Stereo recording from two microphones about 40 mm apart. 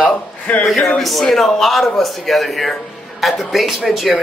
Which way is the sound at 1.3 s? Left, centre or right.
Centre.